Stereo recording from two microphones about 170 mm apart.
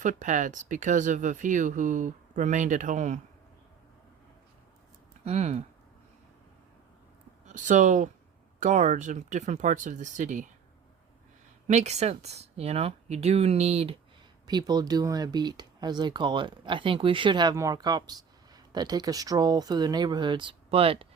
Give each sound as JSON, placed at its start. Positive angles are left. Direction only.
{"t": 0.0, "sound": "speech", "side_deg": -50}
{"t": 5.2, "sound": "speech", "side_deg": -40}
{"t": 7.4, "sound": "speech", "side_deg": -50}
{"t": 11.7, "sound": "speech", "side_deg": -40}
{"t": 14.4, "sound": "speech", "side_deg": -25}